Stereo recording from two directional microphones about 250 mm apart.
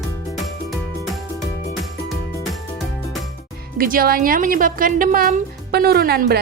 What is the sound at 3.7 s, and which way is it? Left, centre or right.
A woman's voice, right.